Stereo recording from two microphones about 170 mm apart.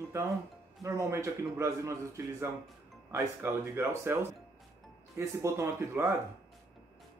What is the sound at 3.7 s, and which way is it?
A man's voice, 15° right (ahead or behind).